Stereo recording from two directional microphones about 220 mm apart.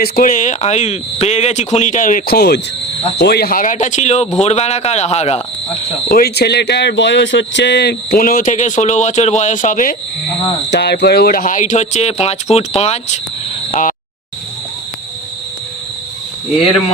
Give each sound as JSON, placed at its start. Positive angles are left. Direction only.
{"t": 0.0, "sound": "a man's voice", "side_deg": 35}
{"t": 6.1, "sound": "speech", "side_deg": 40}
{"t": 10.7, "sound": "speech", "side_deg": 50}